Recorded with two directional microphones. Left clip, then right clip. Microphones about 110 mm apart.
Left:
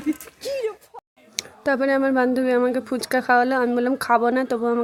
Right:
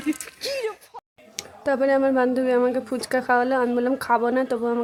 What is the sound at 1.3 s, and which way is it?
Speech, 35° left (ahead or behind).